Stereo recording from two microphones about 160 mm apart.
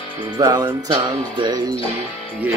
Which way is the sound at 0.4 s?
25° right (ahead or behind).